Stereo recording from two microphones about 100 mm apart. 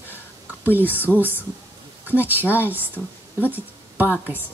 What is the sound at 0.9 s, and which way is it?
A woman's voice, 20° right (ahead or behind).